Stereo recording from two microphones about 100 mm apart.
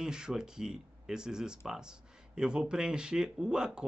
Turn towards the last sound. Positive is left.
turn(degrees=-10)  # may be behind; listen again after turning